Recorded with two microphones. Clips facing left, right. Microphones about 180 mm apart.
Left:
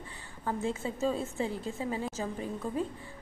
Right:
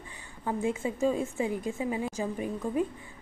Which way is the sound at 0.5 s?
15° right (ahead or behind).